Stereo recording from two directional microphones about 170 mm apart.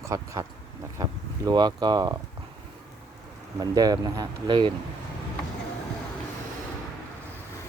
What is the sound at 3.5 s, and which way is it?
Speech, 20° right (ahead or behind).